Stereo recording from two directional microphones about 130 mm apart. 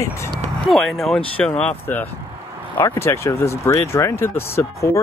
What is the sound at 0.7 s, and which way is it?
Speech, centre (ahead or behind).